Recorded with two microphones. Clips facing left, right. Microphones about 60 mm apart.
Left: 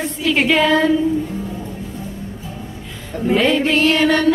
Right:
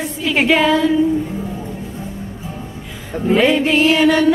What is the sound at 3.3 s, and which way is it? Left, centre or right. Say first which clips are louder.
Music: right 2 dB; centre.